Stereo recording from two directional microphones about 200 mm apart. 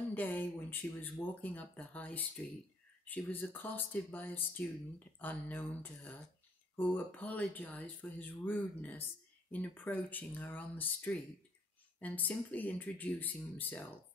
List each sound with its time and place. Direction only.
0.1 s speech: 10° left (ahead or behind)